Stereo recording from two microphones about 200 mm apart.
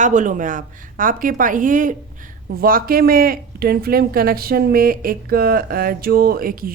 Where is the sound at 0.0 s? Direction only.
40° right (ahead or behind).